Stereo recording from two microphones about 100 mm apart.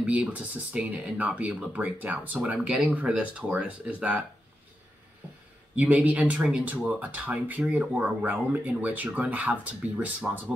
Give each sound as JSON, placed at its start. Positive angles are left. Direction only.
{"t": 0.0, "sound": "speech", "side_deg": -15}
{"t": 5.8, "sound": "speech", "side_deg": -15}